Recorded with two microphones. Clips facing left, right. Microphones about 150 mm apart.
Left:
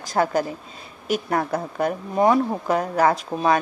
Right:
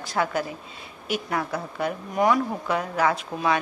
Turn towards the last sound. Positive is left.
turn(degrees=40)  # may be behind; listen again after turning